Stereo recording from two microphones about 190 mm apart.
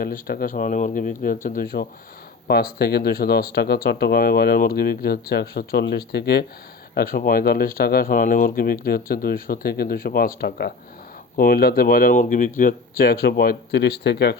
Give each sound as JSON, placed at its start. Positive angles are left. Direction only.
{"t": 0.0, "sound": "speech", "side_deg": 50}